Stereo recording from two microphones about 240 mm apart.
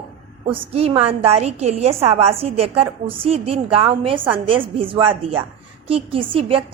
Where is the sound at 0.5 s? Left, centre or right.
Right.